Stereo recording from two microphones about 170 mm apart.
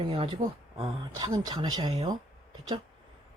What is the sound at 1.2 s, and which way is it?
Speech, 25° right (ahead or behind).